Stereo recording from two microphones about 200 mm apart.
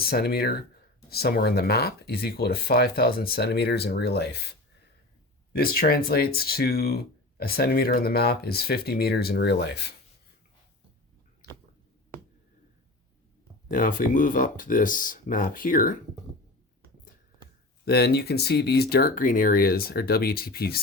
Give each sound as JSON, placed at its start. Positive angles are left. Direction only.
{"t": 0.0, "sound": "speech", "side_deg": 50}
{"t": 5.5, "sound": "speech", "side_deg": 50}
{"t": 13.7, "sound": "speech", "side_deg": 45}
{"t": 17.8, "sound": "speech", "side_deg": 55}